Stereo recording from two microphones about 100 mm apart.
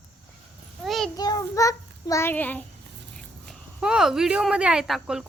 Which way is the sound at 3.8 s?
5° right (ahead or behind).